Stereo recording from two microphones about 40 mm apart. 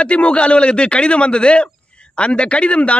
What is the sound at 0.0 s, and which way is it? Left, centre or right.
A man's voice, left.